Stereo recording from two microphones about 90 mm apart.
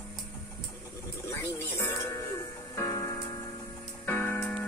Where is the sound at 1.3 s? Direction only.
30° left (ahead or behind).